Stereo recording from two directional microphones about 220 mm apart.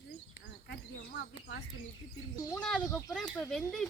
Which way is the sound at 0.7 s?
50° left (ahead or behind).